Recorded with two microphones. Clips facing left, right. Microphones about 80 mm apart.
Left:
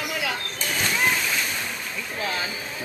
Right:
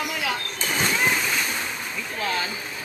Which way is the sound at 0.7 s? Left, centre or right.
Centre.